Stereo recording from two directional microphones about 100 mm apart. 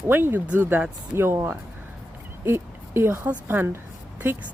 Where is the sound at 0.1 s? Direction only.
20° right (ahead or behind).